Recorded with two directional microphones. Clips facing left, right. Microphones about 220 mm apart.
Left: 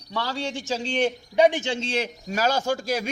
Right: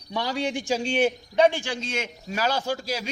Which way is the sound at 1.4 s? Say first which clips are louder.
Left 1 dB; 20° left (ahead or behind).